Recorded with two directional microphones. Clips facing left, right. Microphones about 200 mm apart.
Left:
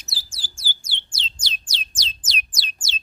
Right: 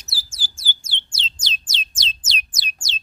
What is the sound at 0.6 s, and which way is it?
Bird, 25° right (ahead or behind).